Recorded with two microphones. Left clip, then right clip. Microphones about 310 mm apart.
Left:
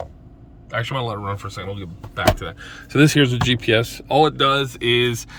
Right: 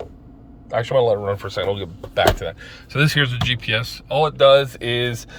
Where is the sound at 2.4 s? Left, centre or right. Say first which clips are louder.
Right 3 dB; centre.